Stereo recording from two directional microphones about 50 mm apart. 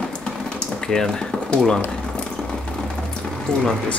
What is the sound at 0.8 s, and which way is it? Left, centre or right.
Typewriter, centre.